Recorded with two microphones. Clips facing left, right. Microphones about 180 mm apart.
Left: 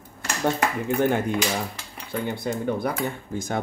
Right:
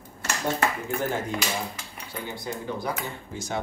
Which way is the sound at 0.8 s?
65° left (ahead or behind).